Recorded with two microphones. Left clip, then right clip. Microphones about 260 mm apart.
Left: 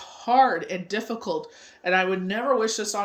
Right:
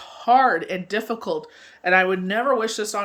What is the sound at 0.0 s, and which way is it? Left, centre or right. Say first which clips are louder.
Speech: right 3 dB; centre.